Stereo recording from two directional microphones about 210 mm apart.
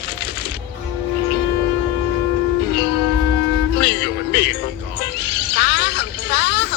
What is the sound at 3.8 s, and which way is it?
Music, 55° left (ahead or behind).